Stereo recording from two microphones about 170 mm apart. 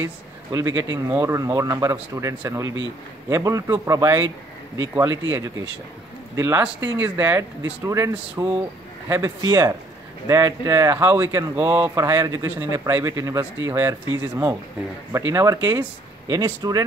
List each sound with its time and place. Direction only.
0.0 s speech: 20° right (ahead or behind)
6.3 s a man's voice: 15° right (ahead or behind)